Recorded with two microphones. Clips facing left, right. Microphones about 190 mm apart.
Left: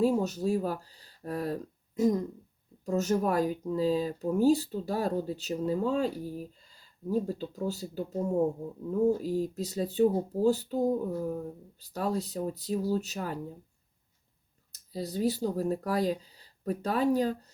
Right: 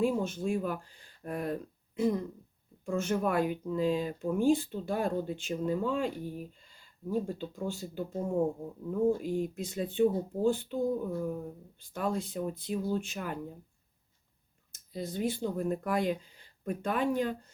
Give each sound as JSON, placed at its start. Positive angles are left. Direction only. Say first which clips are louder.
{"t": 0.0, "sound": "speech", "louder": "left 3 dB", "side_deg": 40}
{"t": 9.0, "sound": "speech", "louder": "left 1 dB", "side_deg": 40}
{"t": 14.7, "sound": "speech", "louder": "left 2 dB", "side_deg": 40}